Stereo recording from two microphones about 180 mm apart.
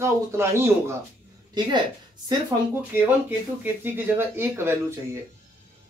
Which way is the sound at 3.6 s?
10° right (ahead or behind).